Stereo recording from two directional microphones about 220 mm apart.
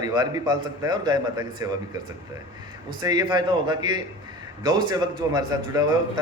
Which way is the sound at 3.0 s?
20° right (ahead or behind).